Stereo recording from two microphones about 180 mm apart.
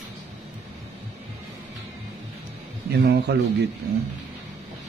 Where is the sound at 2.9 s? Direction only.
65° right (ahead or behind).